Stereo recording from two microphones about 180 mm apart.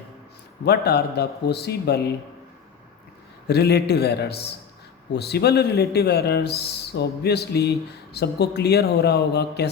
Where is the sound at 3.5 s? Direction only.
65° left (ahead or behind).